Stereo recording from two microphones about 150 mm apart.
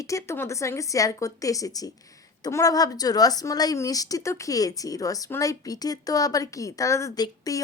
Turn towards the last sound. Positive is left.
turn(degrees=25)  # may be behind; listen again after turning